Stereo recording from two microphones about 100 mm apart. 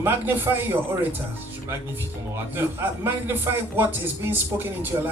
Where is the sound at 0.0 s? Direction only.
20° right (ahead or behind).